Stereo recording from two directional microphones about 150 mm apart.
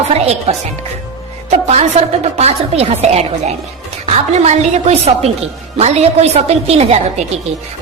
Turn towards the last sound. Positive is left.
turn(degrees=-45)  # may be behind; listen again after turning